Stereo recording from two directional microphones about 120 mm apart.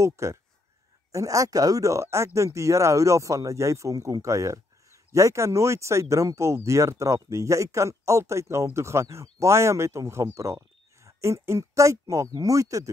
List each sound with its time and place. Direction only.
0.0 s speech: 25° right (ahead or behind)